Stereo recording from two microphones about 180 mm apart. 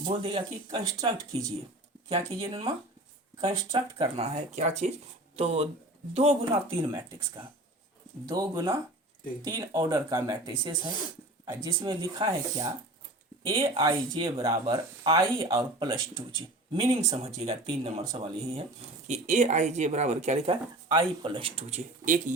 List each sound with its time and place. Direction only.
0.0 s speech: 30° right (ahead or behind)
2.0 s speech: 30° right (ahead or behind)
8.3 s speech: 20° right (ahead or behind)
16.8 s speech: 35° right (ahead or behind)
18.0 s speech: 20° right (ahead or behind)
19.0 s speech: 40° right (ahead or behind)